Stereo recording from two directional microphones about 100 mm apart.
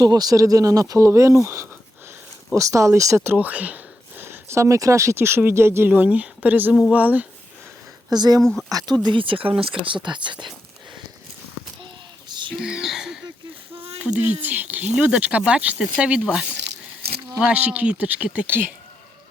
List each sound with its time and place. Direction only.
0.0 s speech: 40° right (ahead or behind)
3.3 s speech: 15° right (ahead or behind)
5.9 s speech: 15° right (ahead or behind)
8.1 s speech: 45° right (ahead or behind)
8.4 s speech: 5° left (ahead or behind)
9.0 s speech: 60° right (ahead or behind)
12.5 s speech: 5° right (ahead or behind)
13.7 s a sound: 75° right (ahead or behind)
14.0 s speech: 15° right (ahead or behind)